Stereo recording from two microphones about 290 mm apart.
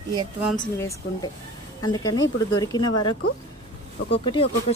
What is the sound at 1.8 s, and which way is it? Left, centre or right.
Speech, centre.